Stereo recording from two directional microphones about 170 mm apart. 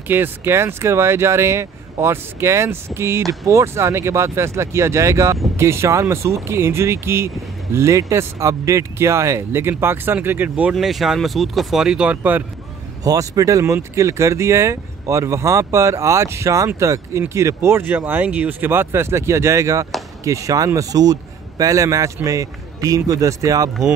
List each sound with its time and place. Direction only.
0.1 s speech: 10° right (ahead or behind)
13.0 s a man's voice: 20° right (ahead or behind)